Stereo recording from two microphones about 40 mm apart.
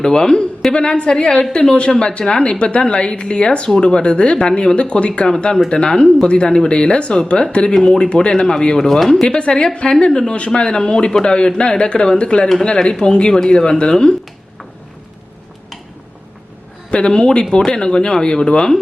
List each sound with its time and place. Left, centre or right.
0.0 s speech: centre
9.0 s speech: centre
9.2 s speech: left
16.9 s speech: left